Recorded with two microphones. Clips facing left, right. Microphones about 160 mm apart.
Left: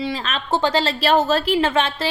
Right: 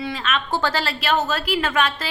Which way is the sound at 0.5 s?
20° left (ahead or behind).